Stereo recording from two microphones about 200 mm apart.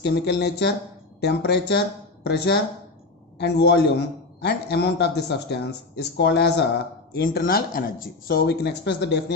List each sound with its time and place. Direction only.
0.0 s speech: 60° left (ahead or behind)